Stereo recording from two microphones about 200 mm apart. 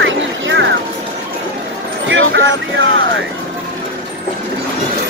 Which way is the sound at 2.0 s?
70° right (ahead or behind).